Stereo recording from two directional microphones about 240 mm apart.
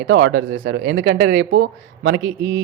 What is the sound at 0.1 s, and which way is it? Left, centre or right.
Speech, right.